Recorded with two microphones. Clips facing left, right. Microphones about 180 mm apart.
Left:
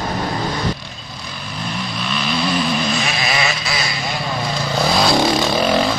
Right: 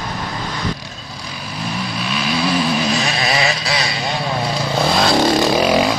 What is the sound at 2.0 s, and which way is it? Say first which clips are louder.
Vehicle: right 1 dB; 10° right (ahead or behind).